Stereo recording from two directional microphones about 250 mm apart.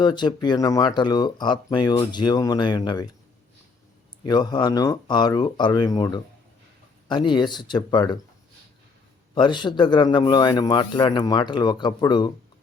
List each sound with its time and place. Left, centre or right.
0.0 s speech: centre
4.3 s speech: centre
9.3 s speech: centre